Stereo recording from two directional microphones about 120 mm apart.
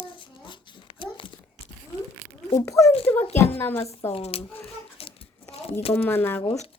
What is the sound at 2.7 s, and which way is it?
Speech, 25° left (ahead or behind).